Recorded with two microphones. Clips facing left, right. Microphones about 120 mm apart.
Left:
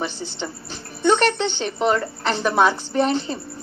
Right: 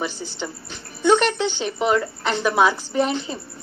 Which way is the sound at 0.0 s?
5° right (ahead or behind).